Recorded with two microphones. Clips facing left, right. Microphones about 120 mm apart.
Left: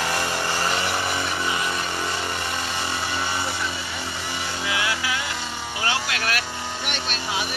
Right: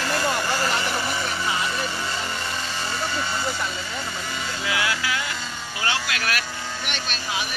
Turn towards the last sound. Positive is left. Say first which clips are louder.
# left 1 dB
turn(degrees=25)  # may be behind; listen again after turning